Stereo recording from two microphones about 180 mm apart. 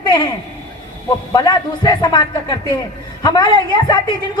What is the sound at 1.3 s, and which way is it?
A woman's voice, 20° left (ahead or behind).